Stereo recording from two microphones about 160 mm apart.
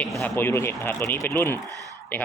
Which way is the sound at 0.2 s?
15° left (ahead or behind).